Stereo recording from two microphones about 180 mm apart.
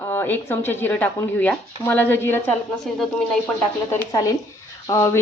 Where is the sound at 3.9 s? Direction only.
20° left (ahead or behind).